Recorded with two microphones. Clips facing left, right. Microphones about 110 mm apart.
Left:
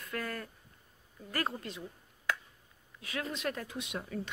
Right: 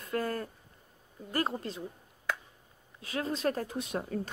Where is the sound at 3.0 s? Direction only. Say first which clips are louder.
Right 5 dB; 35° right (ahead or behind).